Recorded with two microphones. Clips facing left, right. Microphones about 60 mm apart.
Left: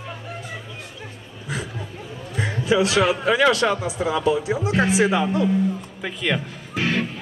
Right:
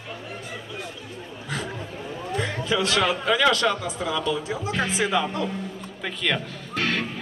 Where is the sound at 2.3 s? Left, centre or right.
Centre.